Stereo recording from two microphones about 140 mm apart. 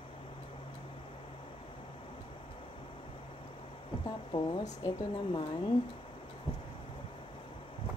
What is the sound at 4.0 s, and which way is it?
Speech, 35° left (ahead or behind).